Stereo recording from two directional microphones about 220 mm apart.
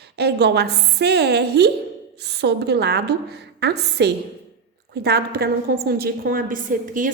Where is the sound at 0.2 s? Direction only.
50° right (ahead or behind).